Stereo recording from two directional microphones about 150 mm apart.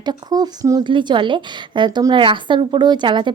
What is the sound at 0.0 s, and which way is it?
A woman's voice, 25° right (ahead or behind).